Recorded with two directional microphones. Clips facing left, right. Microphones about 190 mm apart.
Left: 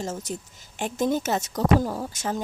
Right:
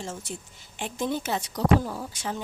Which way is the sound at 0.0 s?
40° left (ahead or behind).